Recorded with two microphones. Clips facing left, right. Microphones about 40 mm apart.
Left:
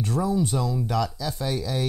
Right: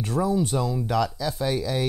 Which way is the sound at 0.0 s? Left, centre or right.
Centre.